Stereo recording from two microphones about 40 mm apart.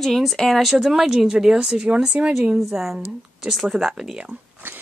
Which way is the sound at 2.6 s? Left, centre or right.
Centre.